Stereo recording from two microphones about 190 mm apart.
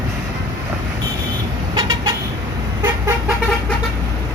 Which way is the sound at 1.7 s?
20° right (ahead or behind).